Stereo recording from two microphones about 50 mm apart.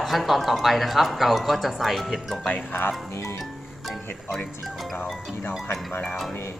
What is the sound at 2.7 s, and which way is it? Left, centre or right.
Speech, left.